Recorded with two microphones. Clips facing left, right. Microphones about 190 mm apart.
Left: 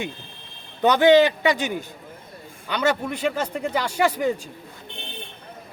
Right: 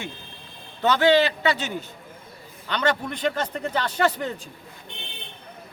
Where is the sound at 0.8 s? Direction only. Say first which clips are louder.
Left 4 dB; 15° left (ahead or behind).